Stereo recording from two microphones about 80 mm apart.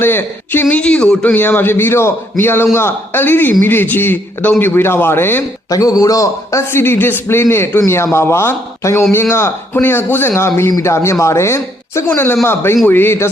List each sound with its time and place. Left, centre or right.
0.0 s a man's voice: left
0.8 s a man's voice: centre
5.7 s a man's voice: left